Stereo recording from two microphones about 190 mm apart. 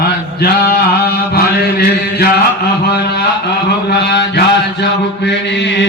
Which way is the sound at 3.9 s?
65° left (ahead or behind).